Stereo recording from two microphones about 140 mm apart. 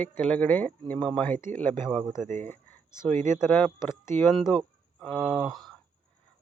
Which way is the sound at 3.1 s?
20° left (ahead or behind).